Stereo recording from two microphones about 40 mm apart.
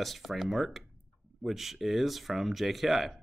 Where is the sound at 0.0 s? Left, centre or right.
Centre.